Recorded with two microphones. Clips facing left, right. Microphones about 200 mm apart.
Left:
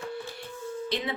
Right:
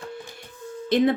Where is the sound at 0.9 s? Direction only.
50° right (ahead or behind).